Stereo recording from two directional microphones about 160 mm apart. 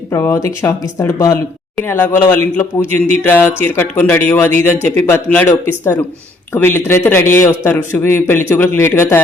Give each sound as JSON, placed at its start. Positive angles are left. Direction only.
{"t": 0.1, "sound": "speech", "side_deg": 15}